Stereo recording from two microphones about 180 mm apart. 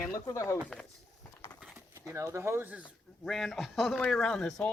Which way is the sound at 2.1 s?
15° right (ahead or behind).